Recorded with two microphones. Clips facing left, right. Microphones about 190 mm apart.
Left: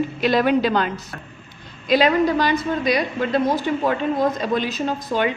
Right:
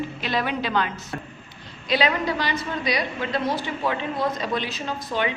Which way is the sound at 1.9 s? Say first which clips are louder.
Left 6 dB; 45° left (ahead or behind).